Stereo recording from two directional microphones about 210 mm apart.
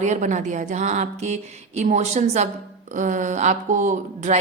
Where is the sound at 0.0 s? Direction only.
35° right (ahead or behind).